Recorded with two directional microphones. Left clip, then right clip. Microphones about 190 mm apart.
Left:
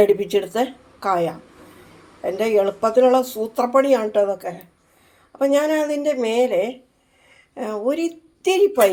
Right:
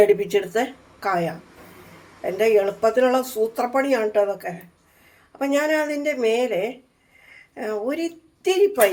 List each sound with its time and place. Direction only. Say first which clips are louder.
0.0 s a woman's voice: left 1 dB; 20° left (ahead or behind)